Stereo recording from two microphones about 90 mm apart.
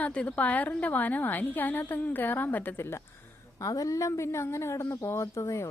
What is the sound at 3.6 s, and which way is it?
Speech, 40° left (ahead or behind).